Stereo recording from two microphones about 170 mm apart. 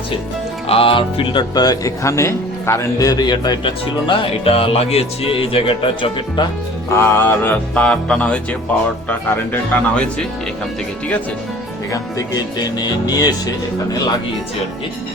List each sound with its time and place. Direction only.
0.7 s speech: 35° left (ahead or behind)
6.9 s music: 15° left (ahead or behind)
11.9 s speech: 20° left (ahead or behind)